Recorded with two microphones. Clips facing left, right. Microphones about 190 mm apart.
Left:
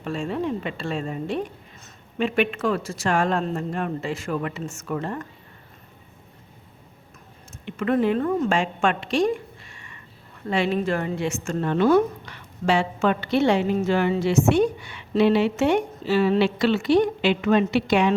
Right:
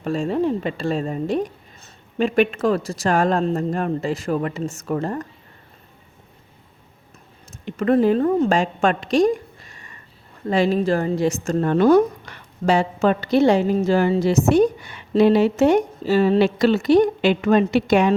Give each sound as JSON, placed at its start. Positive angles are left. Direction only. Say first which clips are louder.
{"t": 0.0, "sound": "speech", "louder": "right 6 dB", "side_deg": -40}
{"t": 7.6, "sound": "a woman's voice", "louder": "right 5 dB", "side_deg": -35}